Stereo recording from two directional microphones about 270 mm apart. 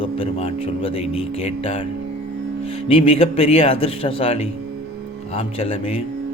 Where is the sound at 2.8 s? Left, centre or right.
Left.